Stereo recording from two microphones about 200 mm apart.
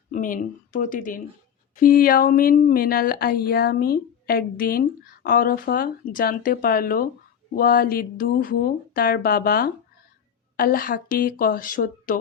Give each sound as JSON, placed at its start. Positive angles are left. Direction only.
{"t": 0.1, "sound": "a woman's voice", "side_deg": 40}